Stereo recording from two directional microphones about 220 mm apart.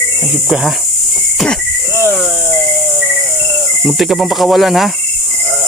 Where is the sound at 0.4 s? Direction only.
Centre (ahead or behind).